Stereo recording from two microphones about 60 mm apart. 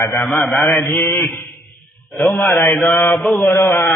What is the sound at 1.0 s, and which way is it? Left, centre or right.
Mantra, left.